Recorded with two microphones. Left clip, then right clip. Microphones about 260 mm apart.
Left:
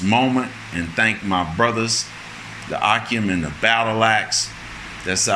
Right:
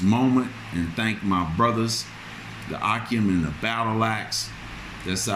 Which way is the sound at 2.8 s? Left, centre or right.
Centre.